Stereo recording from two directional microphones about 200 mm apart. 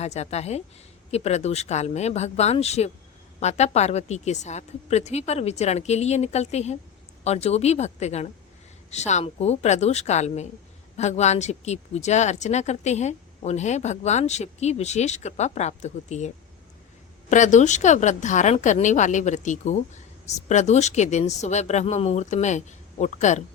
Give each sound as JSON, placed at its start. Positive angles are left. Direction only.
{"t": 0.0, "sound": "speech", "side_deg": 35}